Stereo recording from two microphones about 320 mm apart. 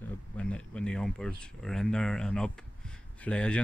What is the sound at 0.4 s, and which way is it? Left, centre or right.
Speech, centre.